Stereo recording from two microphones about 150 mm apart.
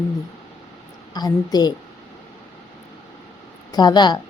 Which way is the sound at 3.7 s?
30° left (ahead or behind).